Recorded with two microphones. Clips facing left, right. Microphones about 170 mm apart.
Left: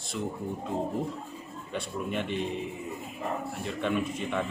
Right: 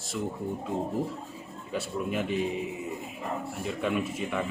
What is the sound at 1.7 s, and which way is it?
Speech, 5° right (ahead or behind).